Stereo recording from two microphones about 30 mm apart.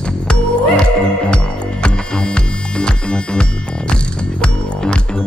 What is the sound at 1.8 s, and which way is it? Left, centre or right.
Music, left.